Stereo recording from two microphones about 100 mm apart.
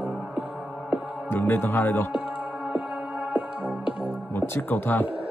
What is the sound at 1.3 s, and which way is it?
Speech, 20° left (ahead or behind).